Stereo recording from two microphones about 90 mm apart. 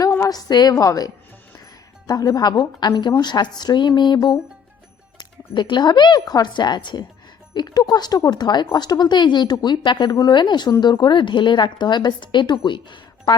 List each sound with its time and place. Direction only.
0.3 s a woman's voice: 45° left (ahead or behind)